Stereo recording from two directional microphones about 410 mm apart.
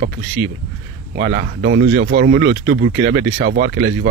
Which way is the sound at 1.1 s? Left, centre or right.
Right.